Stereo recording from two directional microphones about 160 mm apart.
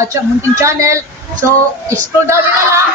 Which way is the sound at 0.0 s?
20° right (ahead or behind).